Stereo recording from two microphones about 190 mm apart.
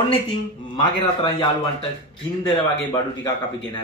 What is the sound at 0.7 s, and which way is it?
Speech, 25° left (ahead or behind).